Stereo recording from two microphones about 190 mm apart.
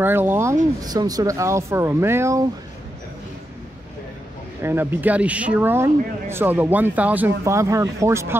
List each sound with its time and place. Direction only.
0.0 s speech: 10° right (ahead or behind)
4.6 s speech: 10° right (ahead or behind)